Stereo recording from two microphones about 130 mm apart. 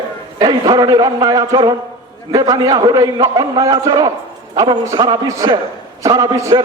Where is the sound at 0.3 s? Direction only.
30° right (ahead or behind).